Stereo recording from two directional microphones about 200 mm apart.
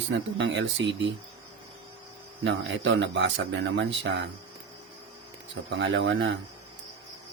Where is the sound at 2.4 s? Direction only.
60° right (ahead or behind).